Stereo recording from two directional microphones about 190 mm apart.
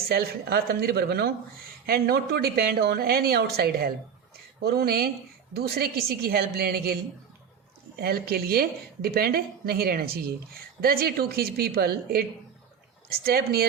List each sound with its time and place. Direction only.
0.1 s a woman's voice: 55° right (ahead or behind)
13.2 s a woman's voice: 55° right (ahead or behind)